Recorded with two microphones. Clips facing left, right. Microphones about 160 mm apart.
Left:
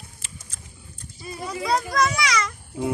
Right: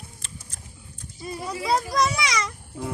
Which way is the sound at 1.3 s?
Centre (ahead or behind).